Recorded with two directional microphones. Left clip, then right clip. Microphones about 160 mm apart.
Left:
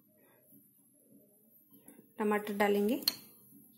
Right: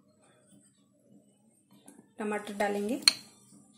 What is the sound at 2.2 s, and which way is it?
Speech, 60° left (ahead or behind).